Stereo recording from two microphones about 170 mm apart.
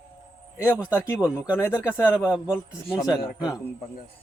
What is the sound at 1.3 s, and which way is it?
Speech, 15° left (ahead or behind).